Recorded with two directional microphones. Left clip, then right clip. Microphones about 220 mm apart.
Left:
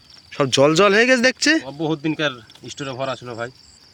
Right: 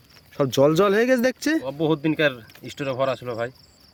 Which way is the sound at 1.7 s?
20° right (ahead or behind).